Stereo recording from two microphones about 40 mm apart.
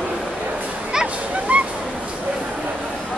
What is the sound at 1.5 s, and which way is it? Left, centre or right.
Honk, right.